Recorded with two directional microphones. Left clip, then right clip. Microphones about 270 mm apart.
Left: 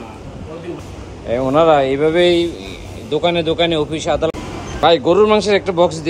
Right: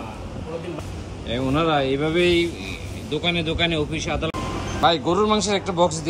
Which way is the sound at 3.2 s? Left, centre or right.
Centre.